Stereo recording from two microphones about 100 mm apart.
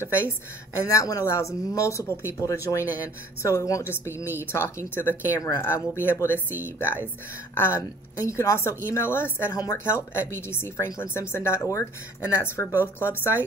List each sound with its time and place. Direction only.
0.0 s speech: 25° left (ahead or behind)